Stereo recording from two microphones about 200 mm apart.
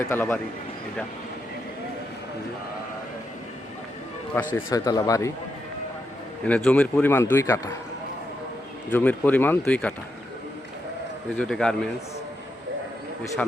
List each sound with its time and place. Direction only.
0.0 s a man's voice: 10° left (ahead or behind)
4.5 s a man's voice: 20° left (ahead or behind)
6.5 s a man's voice: 5° left (ahead or behind)
8.9 s a man's voice: 10° left (ahead or behind)
11.3 s a man's voice: 5° left (ahead or behind)